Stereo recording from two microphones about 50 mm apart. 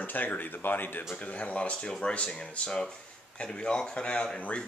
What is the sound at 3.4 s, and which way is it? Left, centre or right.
Speech, centre.